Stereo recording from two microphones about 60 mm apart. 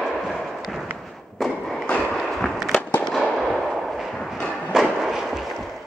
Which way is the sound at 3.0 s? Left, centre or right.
Centre.